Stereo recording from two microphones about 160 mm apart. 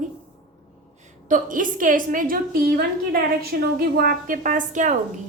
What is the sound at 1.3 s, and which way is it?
A woman's voice, 55° right (ahead or behind).